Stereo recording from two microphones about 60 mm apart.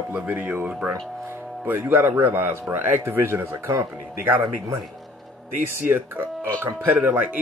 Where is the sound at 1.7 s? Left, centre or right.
Right.